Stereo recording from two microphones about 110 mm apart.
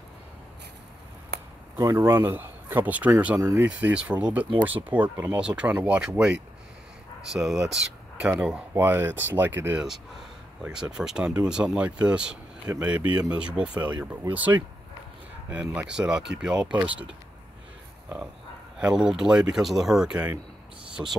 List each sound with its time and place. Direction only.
1.8 s speech: 25° right (ahead or behind)
3.6 s speech: 10° right (ahead or behind)
7.3 s speech: 5° right (ahead or behind)
10.6 s speech: 5° right (ahead or behind)
18.8 s speech: 10° right (ahead or behind)